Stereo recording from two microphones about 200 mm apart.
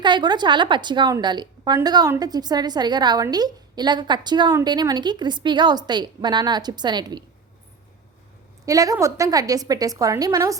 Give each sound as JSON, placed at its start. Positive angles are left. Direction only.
{"t": 0.0, "sound": "a woman's voice", "side_deg": -20}
{"t": 8.6, "sound": "a woman's voice", "side_deg": -15}